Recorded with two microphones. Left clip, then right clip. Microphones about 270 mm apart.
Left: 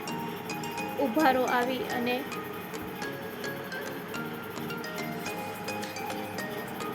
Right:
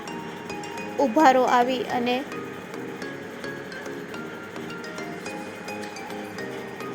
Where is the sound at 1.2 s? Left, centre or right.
Centre.